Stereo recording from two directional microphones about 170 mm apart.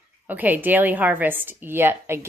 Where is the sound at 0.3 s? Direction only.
10° right (ahead or behind).